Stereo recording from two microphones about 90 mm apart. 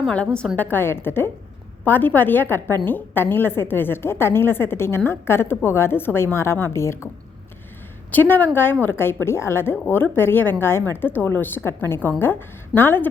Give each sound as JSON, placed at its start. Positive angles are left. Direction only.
{"t": 0.1, "sound": "a woman's voice", "side_deg": 10}
{"t": 8.1, "sound": "a woman's voice", "side_deg": 20}